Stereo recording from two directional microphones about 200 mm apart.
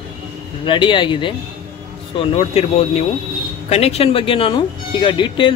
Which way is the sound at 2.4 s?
30° left (ahead or behind).